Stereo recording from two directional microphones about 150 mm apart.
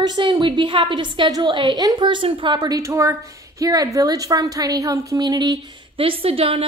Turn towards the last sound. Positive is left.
turn(degrees=-40)  # may be behind; listen again after turning